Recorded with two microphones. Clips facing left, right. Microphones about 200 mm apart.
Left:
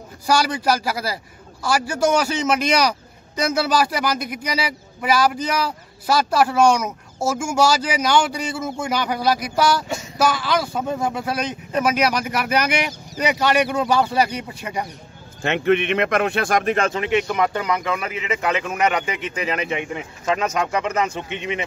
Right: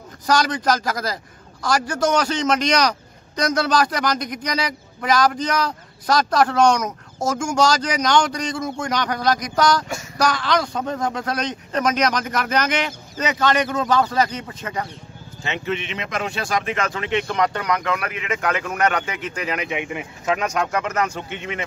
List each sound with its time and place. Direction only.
0.3 s a man's voice: 10° left (ahead or behind)
15.4 s speech: 60° left (ahead or behind)
16.7 s speech: 30° left (ahead or behind)
17.0 s a man's voice: 10° left (ahead or behind)
19.5 s speech: 5° right (ahead or behind)